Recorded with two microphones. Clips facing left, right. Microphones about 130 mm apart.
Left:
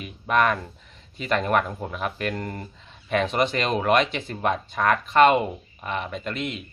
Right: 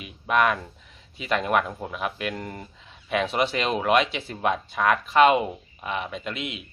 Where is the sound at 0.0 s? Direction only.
5° right (ahead or behind).